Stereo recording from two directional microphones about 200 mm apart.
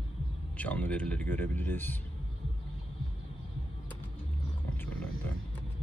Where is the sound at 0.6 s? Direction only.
5° left (ahead or behind).